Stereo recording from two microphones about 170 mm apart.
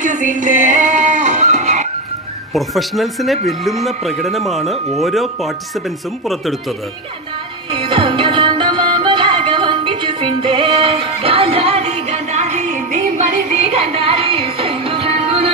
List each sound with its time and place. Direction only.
0.0 s a sound: 45° right (ahead or behind)
2.5 s speech: centre (ahead or behind)
7.7 s music: 30° right (ahead or behind)